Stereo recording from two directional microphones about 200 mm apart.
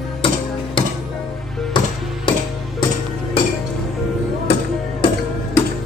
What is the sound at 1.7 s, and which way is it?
Music, 20° left (ahead or behind).